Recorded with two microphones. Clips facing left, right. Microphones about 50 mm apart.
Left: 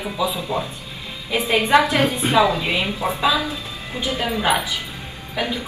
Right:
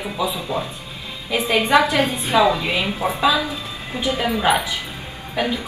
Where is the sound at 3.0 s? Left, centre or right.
Centre.